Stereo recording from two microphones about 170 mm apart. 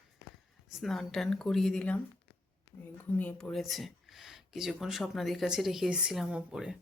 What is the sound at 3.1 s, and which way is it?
Speech, 5° left (ahead or behind).